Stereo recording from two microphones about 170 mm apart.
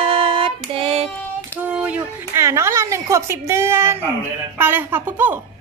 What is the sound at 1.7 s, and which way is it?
A woman's voice, 5° right (ahead or behind).